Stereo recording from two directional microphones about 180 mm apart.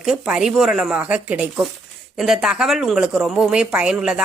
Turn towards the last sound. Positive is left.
turn(degrees=-5)  # may be behind; listen again after turning